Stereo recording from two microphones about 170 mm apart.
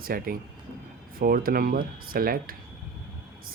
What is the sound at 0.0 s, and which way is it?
Speech, 60° right (ahead or behind).